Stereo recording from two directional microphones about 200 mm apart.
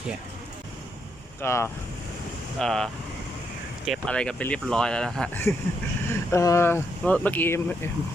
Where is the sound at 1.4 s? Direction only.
15° left (ahead or behind).